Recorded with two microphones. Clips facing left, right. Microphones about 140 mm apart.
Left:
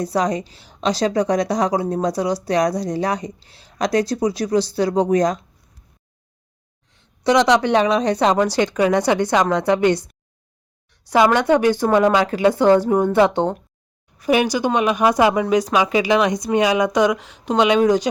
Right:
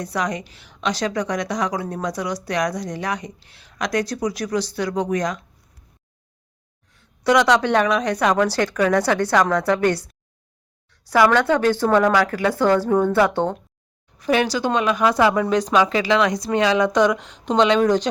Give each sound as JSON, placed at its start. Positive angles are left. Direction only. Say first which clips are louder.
{"t": 0.0, "sound": "a woman's voice", "louder": "left 5 dB", "side_deg": 30}
{"t": 6.9, "sound": "speech", "louder": "left 1 dB", "side_deg": 20}
{"t": 7.9, "sound": "speech", "louder": "left 3 dB", "side_deg": 30}